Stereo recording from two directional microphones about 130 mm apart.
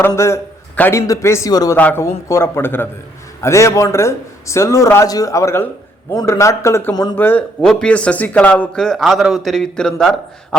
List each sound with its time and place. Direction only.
0.2 s a man's voice: 20° left (ahead or behind)
1.7 s a man's voice: 15° left (ahead or behind)
7.2 s a man's voice: 10° left (ahead or behind)